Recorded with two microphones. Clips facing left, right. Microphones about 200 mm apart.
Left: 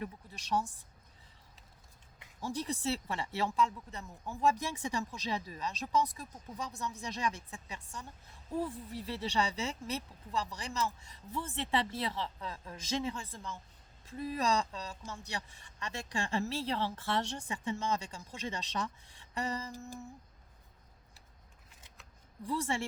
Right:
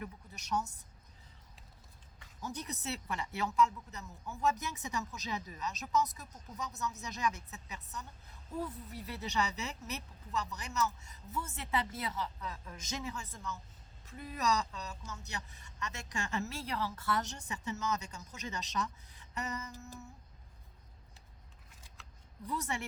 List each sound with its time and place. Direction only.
0.0 s speech: 30° left (ahead or behind)
2.4 s speech: 30° left (ahead or behind)
21.8 s scissors: 20° left (ahead or behind)
22.4 s speech: 30° left (ahead or behind)